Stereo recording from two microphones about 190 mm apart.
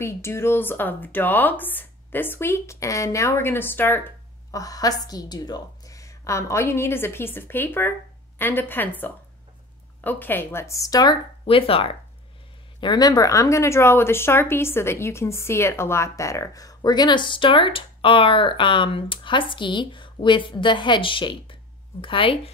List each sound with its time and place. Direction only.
0.0 s a woman's voice: 15° left (ahead or behind)